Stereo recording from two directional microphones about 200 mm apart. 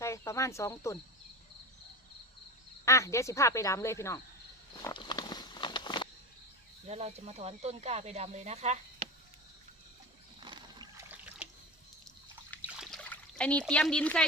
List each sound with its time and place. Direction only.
0.0 s speech: 15° left (ahead or behind)
2.8 s speech: 15° left (ahead or behind)
4.8 s walk: 20° left (ahead or behind)
6.8 s speech: 30° right (ahead or behind)
10.4 s boat: 25° right (ahead or behind)
12.8 s trickle: 5° left (ahead or behind)